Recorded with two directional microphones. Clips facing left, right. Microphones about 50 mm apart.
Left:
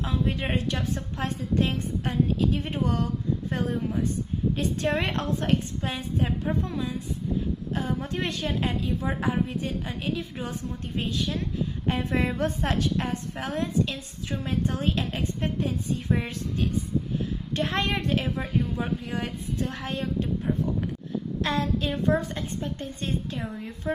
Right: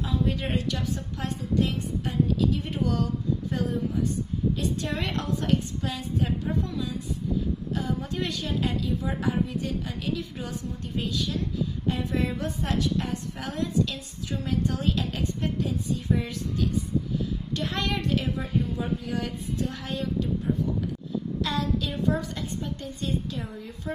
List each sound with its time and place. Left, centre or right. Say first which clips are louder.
0.0 s a woman's voice: even; left